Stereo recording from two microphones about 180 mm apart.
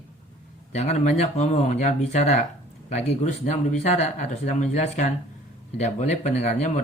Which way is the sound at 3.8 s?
40° left (ahead or behind).